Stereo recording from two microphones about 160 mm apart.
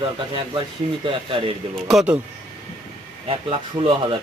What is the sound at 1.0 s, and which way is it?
Speech, 35° right (ahead or behind).